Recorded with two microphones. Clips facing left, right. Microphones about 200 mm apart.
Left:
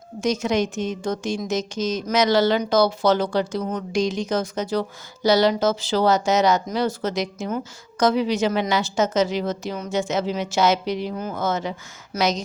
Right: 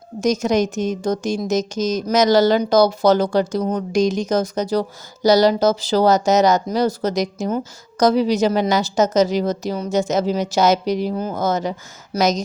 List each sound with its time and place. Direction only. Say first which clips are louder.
0.2 s a woman's voice: right 4 dB; 40° right (ahead or behind)